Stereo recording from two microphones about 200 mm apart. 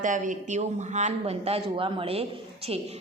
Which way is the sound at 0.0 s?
40° right (ahead or behind).